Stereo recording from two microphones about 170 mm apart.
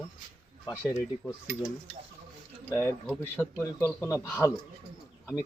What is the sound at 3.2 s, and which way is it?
A man's voice, 15° left (ahead or behind).